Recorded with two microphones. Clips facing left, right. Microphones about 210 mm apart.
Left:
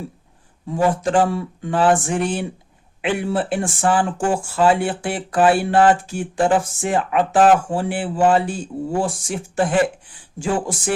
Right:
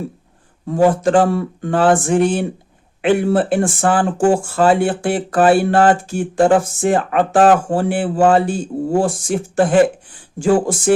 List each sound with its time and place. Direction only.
0.7 s speech: 45° right (ahead or behind)
1.2 s speech: 55° right (ahead or behind)